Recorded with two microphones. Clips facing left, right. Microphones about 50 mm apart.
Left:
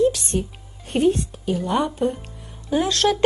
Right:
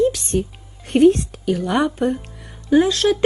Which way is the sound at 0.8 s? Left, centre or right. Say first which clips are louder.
Right 7 dB; right.